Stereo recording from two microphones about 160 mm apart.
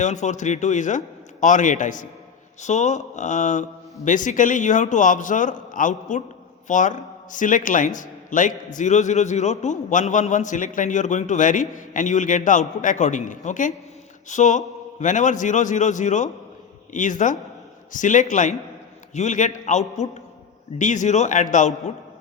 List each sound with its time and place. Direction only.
0.0 s a man's voice: 50° left (ahead or behind)